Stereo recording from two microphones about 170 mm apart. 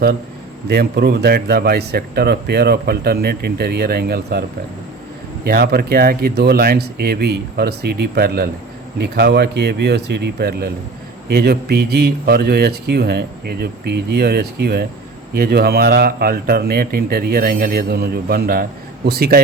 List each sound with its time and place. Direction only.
0.7 s speech: 70° right (ahead or behind)
5.5 s speech: 65° right (ahead or behind)